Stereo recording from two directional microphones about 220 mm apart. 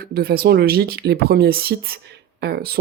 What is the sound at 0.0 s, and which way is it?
Speech, 45° right (ahead or behind).